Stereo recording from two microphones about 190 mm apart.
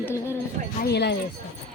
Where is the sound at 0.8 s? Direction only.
60° left (ahead or behind).